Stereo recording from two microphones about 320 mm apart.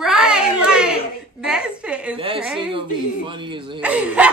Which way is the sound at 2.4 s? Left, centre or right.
Centre.